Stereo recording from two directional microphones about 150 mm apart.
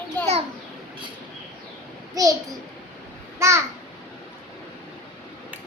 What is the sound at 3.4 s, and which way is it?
Babbling, 20° right (ahead or behind).